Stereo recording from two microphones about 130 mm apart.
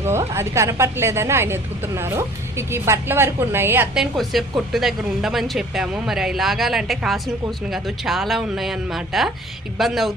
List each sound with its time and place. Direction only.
0.0 s a woman's voice: 20° right (ahead or behind)
3.9 s speech: centre (ahead or behind)